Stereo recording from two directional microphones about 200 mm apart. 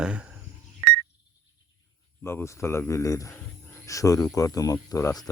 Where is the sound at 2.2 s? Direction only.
15° left (ahead or behind).